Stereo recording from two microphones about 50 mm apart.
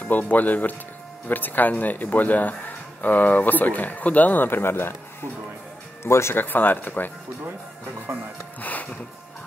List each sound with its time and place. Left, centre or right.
0.1 s speech: left
6.0 s speech: left
6.3 s speech: left
8.1 s speech: right
8.5 s speech: left